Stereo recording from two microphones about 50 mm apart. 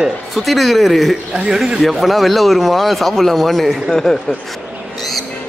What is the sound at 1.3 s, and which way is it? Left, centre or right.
Speech, centre.